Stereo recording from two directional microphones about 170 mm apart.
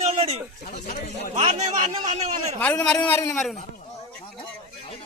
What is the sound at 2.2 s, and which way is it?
Speech, 40° right (ahead or behind).